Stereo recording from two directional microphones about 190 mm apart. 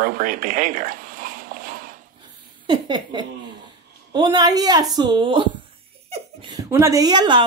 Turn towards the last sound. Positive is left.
turn(degrees=-25)  # may be behind; listen again after turning